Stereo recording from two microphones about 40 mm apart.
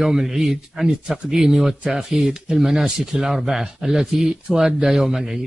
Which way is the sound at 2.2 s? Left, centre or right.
Right.